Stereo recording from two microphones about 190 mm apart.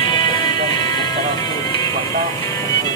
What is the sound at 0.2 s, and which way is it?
Music, 25° left (ahead or behind).